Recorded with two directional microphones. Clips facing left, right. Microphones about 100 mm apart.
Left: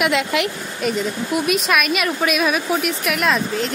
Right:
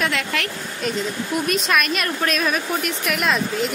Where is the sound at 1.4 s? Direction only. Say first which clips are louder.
Left 2 dB; 5° left (ahead or behind).